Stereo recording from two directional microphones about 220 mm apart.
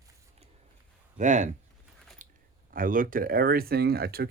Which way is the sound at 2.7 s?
40° right (ahead or behind).